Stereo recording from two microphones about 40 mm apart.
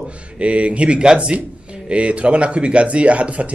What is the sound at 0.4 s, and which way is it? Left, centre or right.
A man's voice, right.